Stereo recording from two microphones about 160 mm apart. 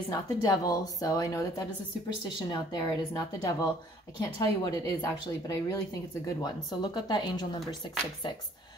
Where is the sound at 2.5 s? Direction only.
25° left (ahead or behind).